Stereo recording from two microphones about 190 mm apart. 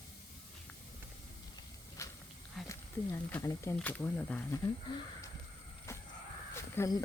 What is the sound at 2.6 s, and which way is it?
Speech, 15° left (ahead or behind).